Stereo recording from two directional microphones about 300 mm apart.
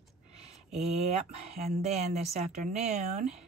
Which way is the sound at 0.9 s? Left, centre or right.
Right.